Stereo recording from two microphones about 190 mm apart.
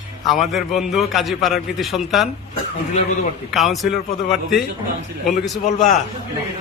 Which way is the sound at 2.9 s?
35° left (ahead or behind).